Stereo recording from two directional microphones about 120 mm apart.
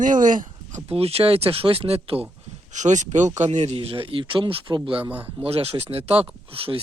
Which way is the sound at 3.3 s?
70° right (ahead or behind).